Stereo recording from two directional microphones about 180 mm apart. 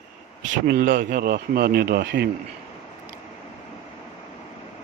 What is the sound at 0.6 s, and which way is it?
Speech, 60° right (ahead or behind).